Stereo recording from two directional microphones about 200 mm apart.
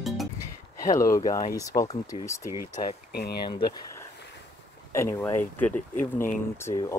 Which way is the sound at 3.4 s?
20° left (ahead or behind).